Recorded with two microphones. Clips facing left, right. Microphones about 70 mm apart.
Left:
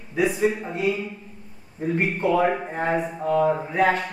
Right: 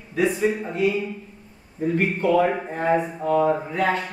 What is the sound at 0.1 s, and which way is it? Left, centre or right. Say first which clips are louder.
Speech: even; centre.